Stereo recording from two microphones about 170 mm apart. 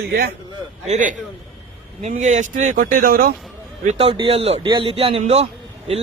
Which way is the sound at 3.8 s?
35° right (ahead or behind).